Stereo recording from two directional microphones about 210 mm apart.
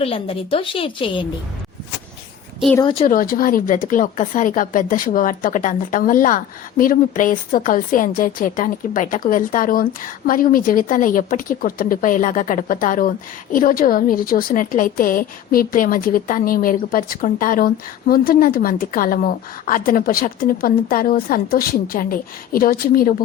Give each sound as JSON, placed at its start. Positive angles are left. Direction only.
{"t": 0.0, "sound": "a woman's voice", "side_deg": 25}
{"t": 3.1, "sound": "a woman's voice", "side_deg": 45}